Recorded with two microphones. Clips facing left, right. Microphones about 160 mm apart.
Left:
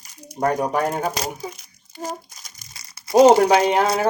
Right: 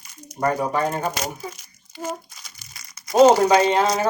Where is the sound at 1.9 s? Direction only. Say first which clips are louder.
Right 1 dB; 40° left (ahead or behind).